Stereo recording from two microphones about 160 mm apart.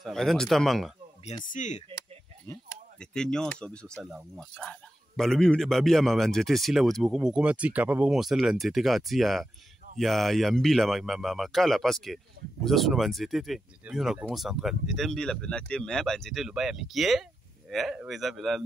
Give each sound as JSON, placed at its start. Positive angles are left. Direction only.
{"t": 0.0, "sound": "speech", "side_deg": 0}
{"t": 1.4, "sound": "speech", "side_deg": 50}
{"t": 2.0, "sound": "a sound", "side_deg": 20}
{"t": 3.0, "sound": "speech", "side_deg": 5}